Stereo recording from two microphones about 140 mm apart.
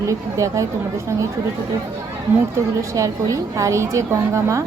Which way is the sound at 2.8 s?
20° right (ahead or behind).